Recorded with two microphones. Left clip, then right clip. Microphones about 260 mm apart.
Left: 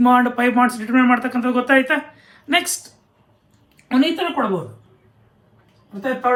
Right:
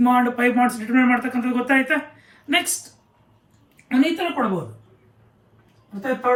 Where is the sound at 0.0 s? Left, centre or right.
Left.